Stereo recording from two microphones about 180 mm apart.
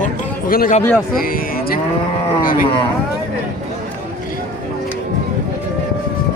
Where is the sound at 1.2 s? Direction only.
55° left (ahead or behind).